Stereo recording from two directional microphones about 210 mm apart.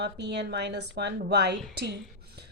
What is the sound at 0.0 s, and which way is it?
Speech, 55° right (ahead or behind).